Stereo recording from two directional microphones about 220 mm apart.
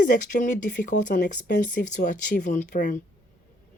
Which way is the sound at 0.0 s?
35° left (ahead or behind).